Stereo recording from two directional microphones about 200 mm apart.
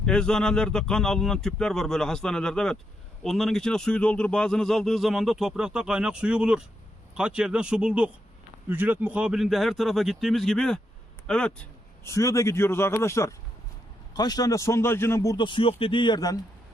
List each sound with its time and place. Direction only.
0.0 s a man's voice: 5° left (ahead or behind); by 16.4 s 20° left (ahead or behind)